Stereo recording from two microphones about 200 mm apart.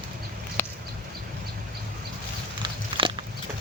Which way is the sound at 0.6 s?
10° left (ahead or behind).